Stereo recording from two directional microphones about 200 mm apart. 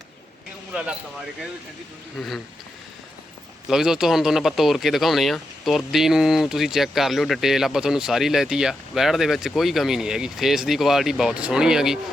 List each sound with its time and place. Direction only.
0.7 s speech: 5° right (ahead or behind)
2.1 s speech: centre (ahead or behind)
3.7 s speech: centre (ahead or behind)